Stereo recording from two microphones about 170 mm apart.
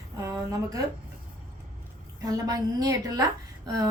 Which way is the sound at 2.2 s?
20° right (ahead or behind).